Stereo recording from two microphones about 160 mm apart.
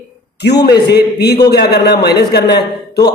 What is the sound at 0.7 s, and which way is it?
A man's voice, 90° left.